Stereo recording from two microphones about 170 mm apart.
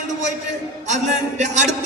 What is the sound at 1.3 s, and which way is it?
Speech, 45° right (ahead or behind).